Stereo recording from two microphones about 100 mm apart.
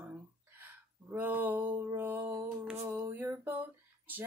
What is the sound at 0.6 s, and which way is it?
Speech, 20° right (ahead or behind).